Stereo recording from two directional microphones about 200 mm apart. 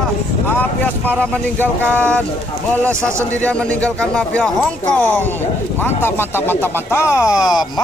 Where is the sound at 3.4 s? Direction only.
5° left (ahead or behind).